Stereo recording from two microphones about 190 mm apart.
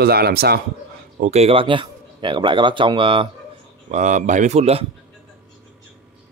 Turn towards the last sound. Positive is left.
turn(degrees=-35)  # may be behind; listen again after turning